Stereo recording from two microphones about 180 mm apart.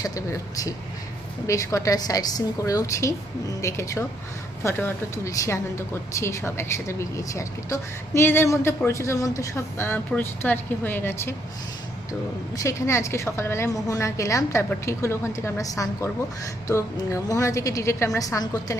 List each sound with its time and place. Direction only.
0.0 s speech: 20° left (ahead or behind)
12.5 s speech: 15° left (ahead or behind)